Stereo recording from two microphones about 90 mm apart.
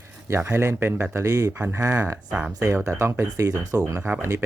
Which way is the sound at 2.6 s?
30° right (ahead or behind).